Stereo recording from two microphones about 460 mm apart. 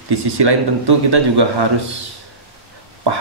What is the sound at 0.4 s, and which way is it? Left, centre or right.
Speech, right.